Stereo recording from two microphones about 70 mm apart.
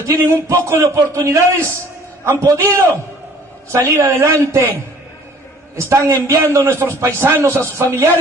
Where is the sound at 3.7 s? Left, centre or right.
Right.